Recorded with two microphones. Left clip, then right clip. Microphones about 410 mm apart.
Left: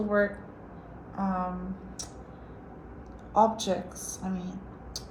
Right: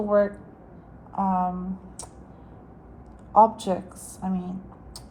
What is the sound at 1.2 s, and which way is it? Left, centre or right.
Speech, right.